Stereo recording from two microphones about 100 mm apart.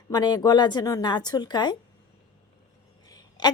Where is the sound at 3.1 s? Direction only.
45° left (ahead or behind).